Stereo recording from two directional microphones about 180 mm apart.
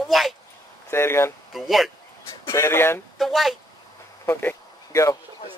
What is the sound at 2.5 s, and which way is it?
Fowl, 15° left (ahead or behind).